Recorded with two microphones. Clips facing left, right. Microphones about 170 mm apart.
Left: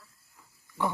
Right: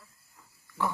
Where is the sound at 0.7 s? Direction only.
20° left (ahead or behind).